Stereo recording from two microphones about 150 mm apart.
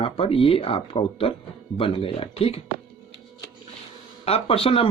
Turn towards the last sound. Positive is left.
turn(degrees=40)  # may be behind; listen again after turning